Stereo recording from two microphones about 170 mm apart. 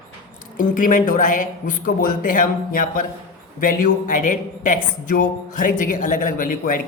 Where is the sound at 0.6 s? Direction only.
50° left (ahead or behind).